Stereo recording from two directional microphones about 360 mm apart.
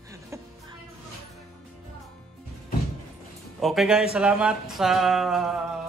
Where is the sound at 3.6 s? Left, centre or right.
Centre.